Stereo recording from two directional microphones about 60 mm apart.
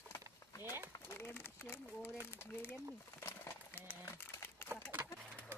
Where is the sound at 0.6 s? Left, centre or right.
Right.